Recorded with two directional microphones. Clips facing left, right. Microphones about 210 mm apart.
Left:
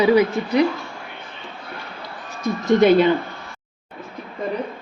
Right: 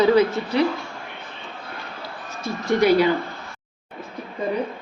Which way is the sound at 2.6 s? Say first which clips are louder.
Left 3 dB; 20° left (ahead or behind).